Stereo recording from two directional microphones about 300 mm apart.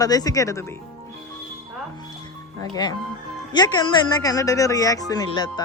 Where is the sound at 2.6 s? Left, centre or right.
Centre.